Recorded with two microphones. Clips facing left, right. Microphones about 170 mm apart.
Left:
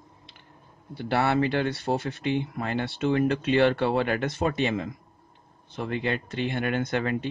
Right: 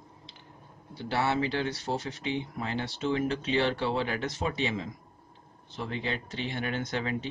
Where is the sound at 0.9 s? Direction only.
60° left (ahead or behind).